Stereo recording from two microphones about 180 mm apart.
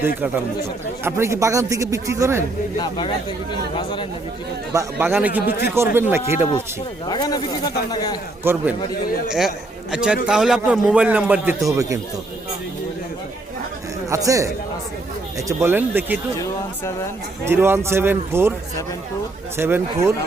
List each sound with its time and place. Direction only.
1.0 s a man's voice: 15° right (ahead or behind)
2.7 s speech: 25° left (ahead or behind)
4.7 s a man's voice: 15° right (ahead or behind)
7.1 s speech: 20° left (ahead or behind)
8.4 s a man's voice: 10° right (ahead or behind)
9.9 s a man's voice: 5° right (ahead or behind)
14.1 s a man's voice: 15° right (ahead or behind)
17.4 s a man's voice: 15° right (ahead or behind)
19.5 s a man's voice: 15° right (ahead or behind)